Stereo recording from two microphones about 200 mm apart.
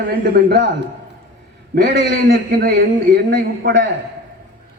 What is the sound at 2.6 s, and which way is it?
A man's voice, 55° right (ahead or behind).